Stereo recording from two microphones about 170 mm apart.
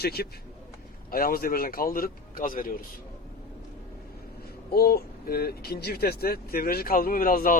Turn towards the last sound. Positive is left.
turn(degrees=55)  # may be behind; listen again after turning